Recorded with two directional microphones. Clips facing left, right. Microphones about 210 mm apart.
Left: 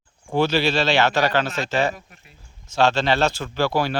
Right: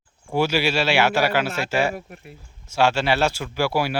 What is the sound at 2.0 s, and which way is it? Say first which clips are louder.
Speech: right 9 dB; 60° right (ahead or behind).